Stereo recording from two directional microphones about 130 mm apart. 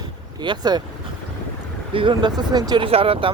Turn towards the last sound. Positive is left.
turn(degrees=-45)  # may be behind; listen again after turning